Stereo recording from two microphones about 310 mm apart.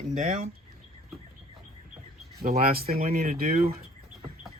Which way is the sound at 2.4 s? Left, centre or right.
Right.